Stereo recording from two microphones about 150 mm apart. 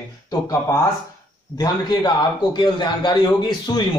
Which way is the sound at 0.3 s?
20° left (ahead or behind).